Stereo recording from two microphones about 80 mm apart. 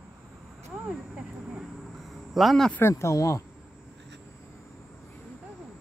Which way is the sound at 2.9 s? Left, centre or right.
Left.